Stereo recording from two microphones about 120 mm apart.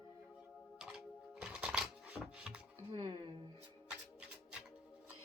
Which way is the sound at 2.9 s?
40° right (ahead or behind).